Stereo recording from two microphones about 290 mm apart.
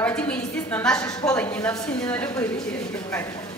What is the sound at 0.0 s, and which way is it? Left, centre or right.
A woman's voice, centre.